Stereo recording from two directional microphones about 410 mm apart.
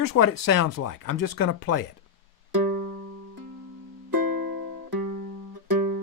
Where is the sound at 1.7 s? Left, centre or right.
Left.